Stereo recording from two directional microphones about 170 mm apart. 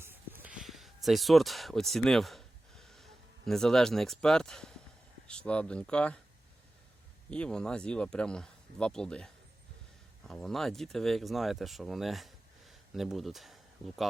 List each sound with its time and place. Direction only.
0.0 s a sound: 10° right (ahead or behind)
0.6 s speech: centre (ahead or behind)
7.3 s speech: 5° left (ahead or behind)